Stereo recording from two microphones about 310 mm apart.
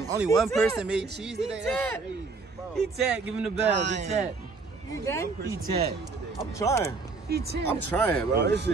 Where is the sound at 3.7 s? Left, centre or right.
Right.